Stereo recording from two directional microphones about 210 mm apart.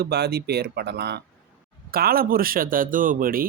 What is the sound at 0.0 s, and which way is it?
A man's voice, 50° right (ahead or behind).